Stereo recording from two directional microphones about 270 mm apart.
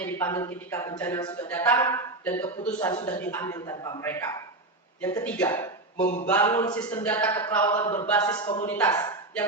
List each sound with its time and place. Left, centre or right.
0.0 s speech: centre
6.0 s a sound: left
6.2 s a woman's voice: centre